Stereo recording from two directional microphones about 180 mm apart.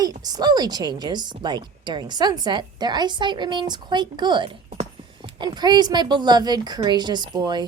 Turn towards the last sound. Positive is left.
turn(degrees=-25)  # may be behind; listen again after turning